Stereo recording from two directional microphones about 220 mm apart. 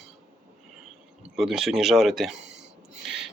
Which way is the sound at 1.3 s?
Centre (ahead or behind).